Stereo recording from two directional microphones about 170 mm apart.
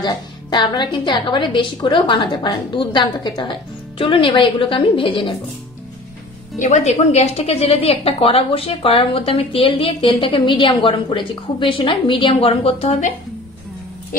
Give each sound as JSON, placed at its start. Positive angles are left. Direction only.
{"t": 0.0, "sound": "a woman's voice", "side_deg": 25}
{"t": 6.6, "sound": "a woman's voice", "side_deg": 45}